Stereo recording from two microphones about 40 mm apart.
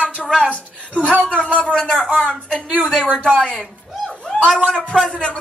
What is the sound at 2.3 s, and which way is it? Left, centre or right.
Speech, left.